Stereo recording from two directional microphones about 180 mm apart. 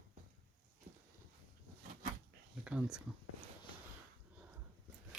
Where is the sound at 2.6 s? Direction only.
5° right (ahead or behind).